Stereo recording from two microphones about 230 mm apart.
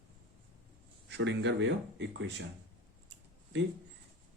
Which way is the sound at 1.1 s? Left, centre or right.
Right.